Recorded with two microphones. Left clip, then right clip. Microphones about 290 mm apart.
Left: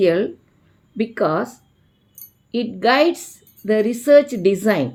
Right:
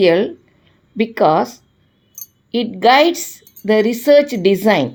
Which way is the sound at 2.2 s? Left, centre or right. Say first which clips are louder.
Right 12 dB; right.